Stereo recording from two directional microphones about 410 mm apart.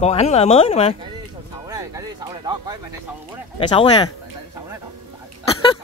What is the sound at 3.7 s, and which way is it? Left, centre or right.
Speech, centre.